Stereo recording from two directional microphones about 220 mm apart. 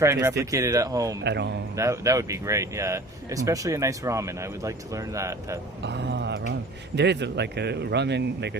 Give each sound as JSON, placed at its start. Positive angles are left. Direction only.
{"t": 0.0, "sound": "speech", "side_deg": -15}
{"t": 1.2, "sound": "speech", "side_deg": -50}
{"t": 1.7, "sound": "speech", "side_deg": -15}
{"t": 5.8, "sound": "speech", "side_deg": -50}